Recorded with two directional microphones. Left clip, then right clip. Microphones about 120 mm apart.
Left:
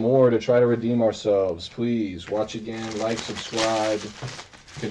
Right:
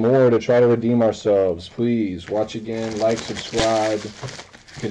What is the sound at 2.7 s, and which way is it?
Speech, 25° right (ahead or behind).